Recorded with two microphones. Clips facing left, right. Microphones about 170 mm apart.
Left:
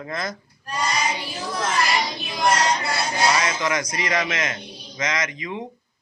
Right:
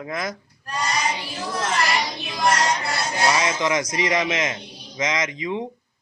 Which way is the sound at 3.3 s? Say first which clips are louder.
Right 1 dB; 20° right (ahead or behind).